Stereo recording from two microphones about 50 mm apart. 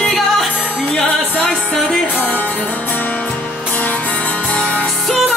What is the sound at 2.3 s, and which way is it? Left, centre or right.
Music, left.